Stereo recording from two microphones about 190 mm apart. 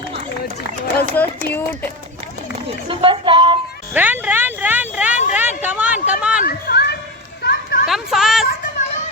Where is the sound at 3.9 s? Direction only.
10° right (ahead or behind).